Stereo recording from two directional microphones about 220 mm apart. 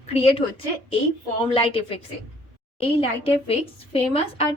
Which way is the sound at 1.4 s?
25° left (ahead or behind).